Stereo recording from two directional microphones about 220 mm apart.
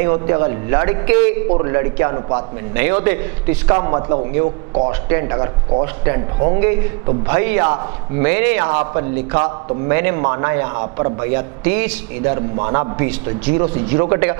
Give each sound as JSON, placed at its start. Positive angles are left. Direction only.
{"t": 0.0, "sound": "a man's voice", "side_deg": -15}